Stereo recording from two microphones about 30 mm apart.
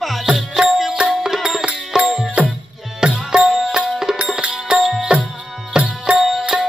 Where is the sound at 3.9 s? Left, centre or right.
Centre.